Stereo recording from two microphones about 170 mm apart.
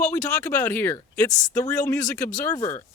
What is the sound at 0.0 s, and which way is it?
Speech, 15° left (ahead or behind).